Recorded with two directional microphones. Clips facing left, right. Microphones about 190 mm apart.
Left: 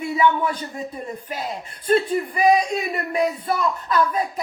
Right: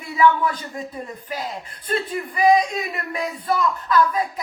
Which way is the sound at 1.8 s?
25° left (ahead or behind).